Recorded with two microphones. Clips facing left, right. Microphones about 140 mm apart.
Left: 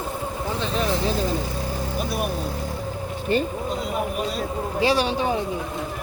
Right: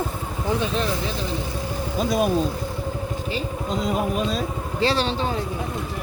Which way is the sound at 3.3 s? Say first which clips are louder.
Left 9 dB; 55° left (ahead or behind).